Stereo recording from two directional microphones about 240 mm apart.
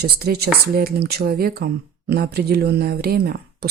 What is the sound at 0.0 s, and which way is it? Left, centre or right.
Speech, right.